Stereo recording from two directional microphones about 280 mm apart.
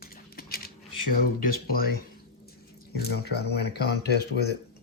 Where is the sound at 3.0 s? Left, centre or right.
Left.